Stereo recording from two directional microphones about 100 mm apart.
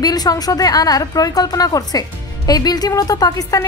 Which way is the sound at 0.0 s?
40° left (ahead or behind).